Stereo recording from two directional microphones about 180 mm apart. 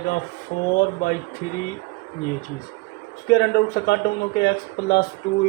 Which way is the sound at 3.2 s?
65° left (ahead or behind).